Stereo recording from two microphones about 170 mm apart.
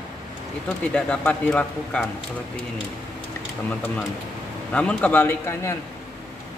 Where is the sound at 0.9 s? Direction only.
5° left (ahead or behind).